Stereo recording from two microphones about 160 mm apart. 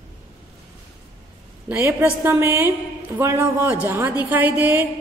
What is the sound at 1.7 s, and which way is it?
A woman's voice, 10° right (ahead or behind).